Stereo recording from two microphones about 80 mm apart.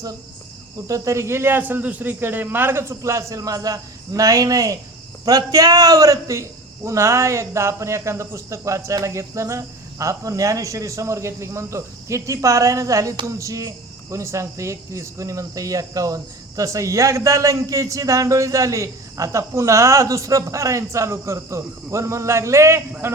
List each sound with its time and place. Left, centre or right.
0.9 s speech: right
2.9 s a man's voice: right